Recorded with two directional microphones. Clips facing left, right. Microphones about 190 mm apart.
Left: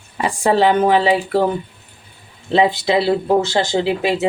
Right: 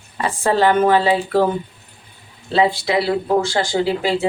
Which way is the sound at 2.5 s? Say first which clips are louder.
Left 2 dB; 20° left (ahead or behind).